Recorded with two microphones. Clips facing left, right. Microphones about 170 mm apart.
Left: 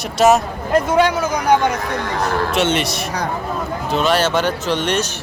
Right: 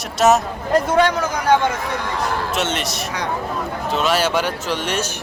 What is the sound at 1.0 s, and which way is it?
Speech, 10° left (ahead or behind).